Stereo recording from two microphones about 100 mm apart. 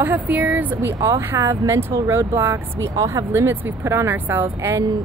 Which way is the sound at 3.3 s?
20° right (ahead or behind).